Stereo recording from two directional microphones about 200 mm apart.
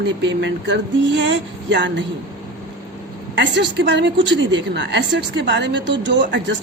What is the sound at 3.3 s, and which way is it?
A woman's voice, 60° right (ahead or behind).